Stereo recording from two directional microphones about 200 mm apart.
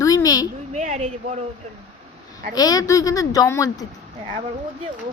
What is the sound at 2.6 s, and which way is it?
Speech, 20° left (ahead or behind).